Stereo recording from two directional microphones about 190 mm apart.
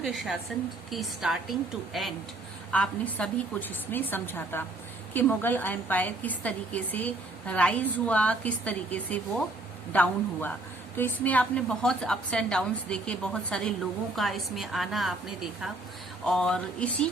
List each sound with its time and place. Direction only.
0.0 s a woman's voice: centre (ahead or behind)
16.2 s a woman's voice: 5° left (ahead or behind)